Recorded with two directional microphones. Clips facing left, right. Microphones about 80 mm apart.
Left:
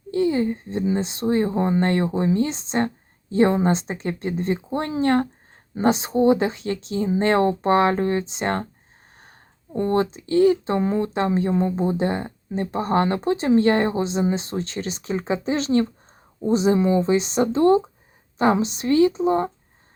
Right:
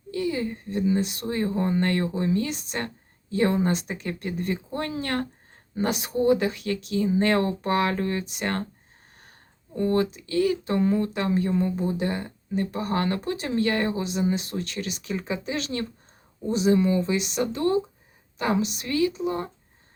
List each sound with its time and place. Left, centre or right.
0.1 s speech: left
9.7 s speech: left